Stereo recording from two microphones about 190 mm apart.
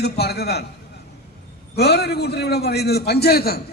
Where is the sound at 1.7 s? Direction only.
60° left (ahead or behind).